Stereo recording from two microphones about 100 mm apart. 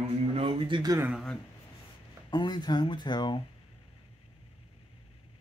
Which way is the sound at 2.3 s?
45° left (ahead or behind).